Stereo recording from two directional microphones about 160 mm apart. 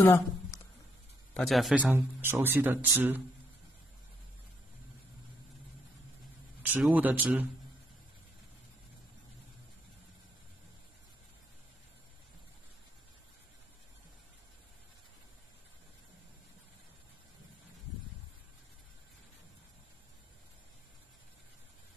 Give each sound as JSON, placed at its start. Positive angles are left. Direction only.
{"t": 0.0, "sound": "a sound", "side_deg": 15}
{"t": 1.3, "sound": "speech", "side_deg": 0}
{"t": 1.9, "sound": "speech", "side_deg": -15}
{"t": 6.6, "sound": "speech", "side_deg": -10}